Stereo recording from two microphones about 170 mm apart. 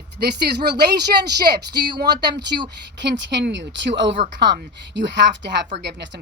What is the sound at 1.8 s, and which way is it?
Speech, 25° right (ahead or behind).